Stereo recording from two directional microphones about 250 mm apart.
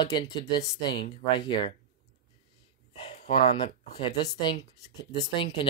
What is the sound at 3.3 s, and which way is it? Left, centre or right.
Speech, centre.